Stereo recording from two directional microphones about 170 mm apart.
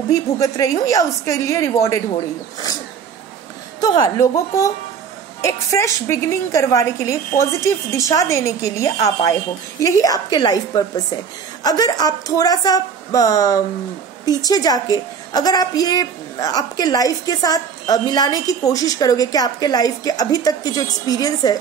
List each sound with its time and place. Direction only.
0.1 s a woman's voice: 20° left (ahead or behind)
3.8 s a woman's voice: 20° left (ahead or behind)